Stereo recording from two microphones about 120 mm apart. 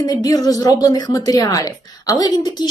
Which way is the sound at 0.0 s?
35° left (ahead or behind).